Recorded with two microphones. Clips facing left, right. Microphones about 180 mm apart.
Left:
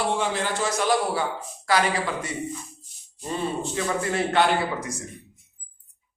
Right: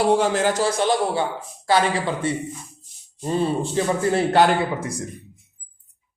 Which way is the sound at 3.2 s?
30° right (ahead or behind).